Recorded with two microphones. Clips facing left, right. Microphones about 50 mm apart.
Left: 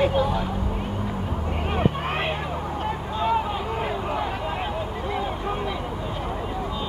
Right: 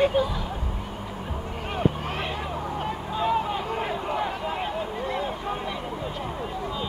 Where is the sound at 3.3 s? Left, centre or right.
Centre.